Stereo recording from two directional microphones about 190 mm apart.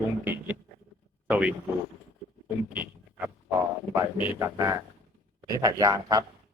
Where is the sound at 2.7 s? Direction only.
10° right (ahead or behind).